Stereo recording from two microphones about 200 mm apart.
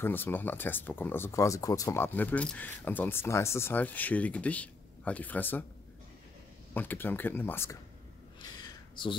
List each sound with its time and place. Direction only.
0.0 s speech: 10° left (ahead or behind)
6.7 s speech: 10° left (ahead or behind)
9.0 s speech: 25° left (ahead or behind)